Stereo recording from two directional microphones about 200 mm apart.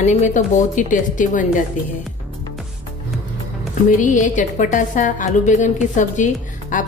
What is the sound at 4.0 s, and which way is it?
A woman's voice, 40° left (ahead or behind).